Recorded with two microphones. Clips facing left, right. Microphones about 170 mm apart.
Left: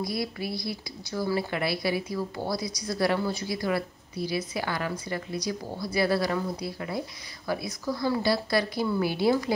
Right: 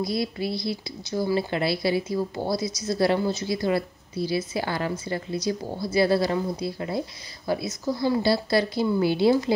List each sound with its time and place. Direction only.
0.0 s a woman's voice: 25° right (ahead or behind)